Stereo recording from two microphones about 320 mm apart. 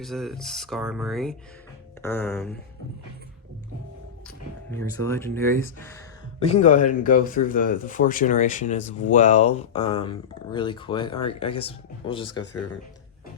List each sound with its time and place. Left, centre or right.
0.0 s speech: centre
5.0 s speech: centre
6.4 s speech: centre